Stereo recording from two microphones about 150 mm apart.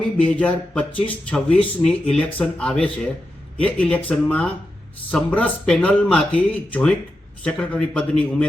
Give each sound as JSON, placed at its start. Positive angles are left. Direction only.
{"t": 0.2, "sound": "speech", "side_deg": 10}